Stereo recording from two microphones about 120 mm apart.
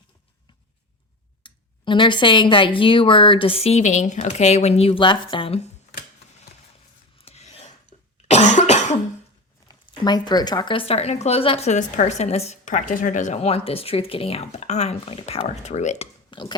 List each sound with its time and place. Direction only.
1.5 s speech: 40° left (ahead or behind)
7.2 s filing: 60° left (ahead or behind)
7.9 s cough: 60° left (ahead or behind)
8.3 s cough: 85° left
9.6 s speech: 35° left (ahead or behind)
10.8 s a woman's voice: 60° left (ahead or behind); by 16.0 s 75° left (ahead or behind)
16.3 s speech: 40° left (ahead or behind)